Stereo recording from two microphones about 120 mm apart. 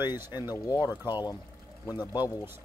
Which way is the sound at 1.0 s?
35° left (ahead or behind).